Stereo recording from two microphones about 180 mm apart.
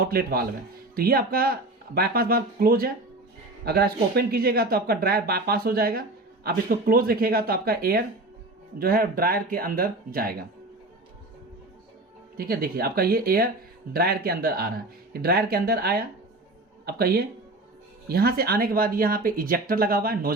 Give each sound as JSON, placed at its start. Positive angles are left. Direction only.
{"t": 0.0, "sound": "speech", "side_deg": -55}
{"t": 12.4, "sound": "speech", "side_deg": -55}